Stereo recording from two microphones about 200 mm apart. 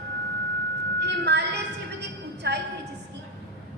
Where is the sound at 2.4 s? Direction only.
55° right (ahead or behind).